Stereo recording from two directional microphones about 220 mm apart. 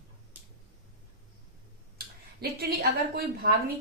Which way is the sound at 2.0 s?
45° right (ahead or behind).